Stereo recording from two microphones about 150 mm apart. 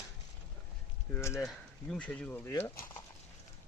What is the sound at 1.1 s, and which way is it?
Speech, 20° left (ahead or behind).